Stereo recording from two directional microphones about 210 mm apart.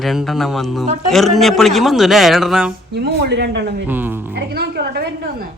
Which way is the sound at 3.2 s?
55° right (ahead or behind).